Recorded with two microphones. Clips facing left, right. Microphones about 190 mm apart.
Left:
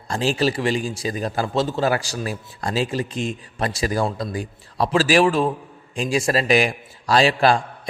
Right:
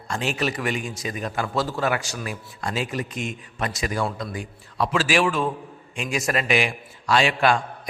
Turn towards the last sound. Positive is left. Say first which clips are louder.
# left 3 dB
turn(degrees=35)  # may be behind; listen again after turning